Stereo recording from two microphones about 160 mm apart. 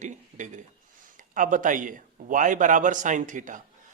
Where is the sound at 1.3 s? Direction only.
55° right (ahead or behind).